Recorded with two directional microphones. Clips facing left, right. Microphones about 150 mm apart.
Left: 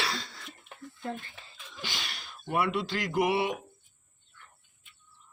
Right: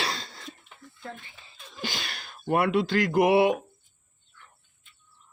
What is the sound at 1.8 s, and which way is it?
Speech, 50° right (ahead or behind).